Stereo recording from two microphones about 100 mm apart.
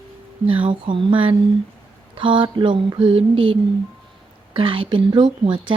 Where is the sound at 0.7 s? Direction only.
60° right (ahead or behind).